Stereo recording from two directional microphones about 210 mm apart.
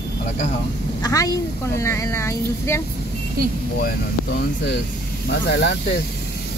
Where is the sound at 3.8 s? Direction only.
50° left (ahead or behind).